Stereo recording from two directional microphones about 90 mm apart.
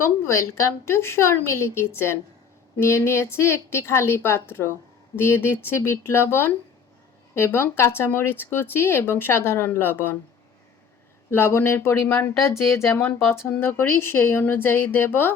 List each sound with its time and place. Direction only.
0.0 s speech: 30° left (ahead or behind)
11.3 s speech: 25° left (ahead or behind)